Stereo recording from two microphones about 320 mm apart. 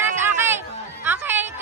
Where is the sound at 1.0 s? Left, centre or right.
Centre.